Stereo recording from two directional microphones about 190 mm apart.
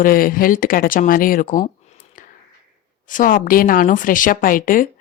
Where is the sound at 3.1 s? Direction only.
45° left (ahead or behind).